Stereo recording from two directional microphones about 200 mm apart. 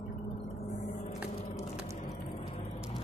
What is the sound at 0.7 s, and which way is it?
Vehicle, 35° left (ahead or behind).